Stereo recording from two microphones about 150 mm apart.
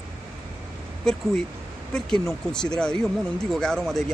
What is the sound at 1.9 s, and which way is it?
Speech, 5° left (ahead or behind).